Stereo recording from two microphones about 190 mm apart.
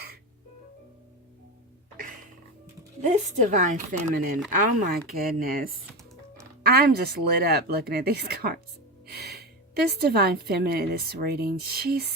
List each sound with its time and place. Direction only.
3.0 s a woman's voice: 40° right (ahead or behind)